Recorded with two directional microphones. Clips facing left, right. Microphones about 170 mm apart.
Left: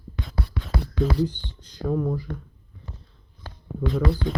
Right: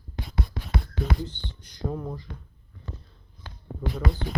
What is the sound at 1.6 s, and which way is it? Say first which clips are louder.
Speech: left 7 dB; 10° right (ahead or behind).